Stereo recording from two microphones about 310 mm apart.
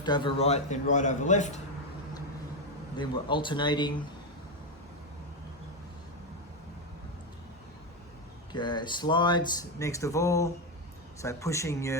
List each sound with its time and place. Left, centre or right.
0.0 s a man's voice: centre
3.0 s speech: centre
8.5 s speech: centre